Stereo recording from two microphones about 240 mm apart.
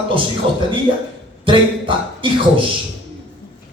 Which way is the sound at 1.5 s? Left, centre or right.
Right.